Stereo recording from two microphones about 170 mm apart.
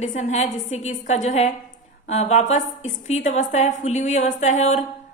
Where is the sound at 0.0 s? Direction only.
45° left (ahead or behind).